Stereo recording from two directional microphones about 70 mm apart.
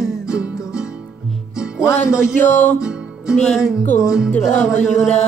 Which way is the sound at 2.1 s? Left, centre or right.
Left.